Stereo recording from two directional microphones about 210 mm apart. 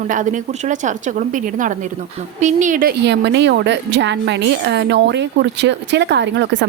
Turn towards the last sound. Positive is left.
turn(degrees=-55)  # may be behind; listen again after turning